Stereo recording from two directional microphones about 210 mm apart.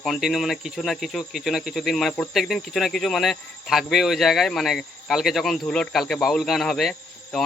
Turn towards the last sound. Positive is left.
turn(degrees=0)  # may be behind; listen again after turning